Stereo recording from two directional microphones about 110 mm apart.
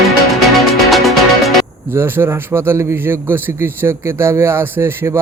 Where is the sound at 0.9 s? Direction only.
Centre (ahead or behind).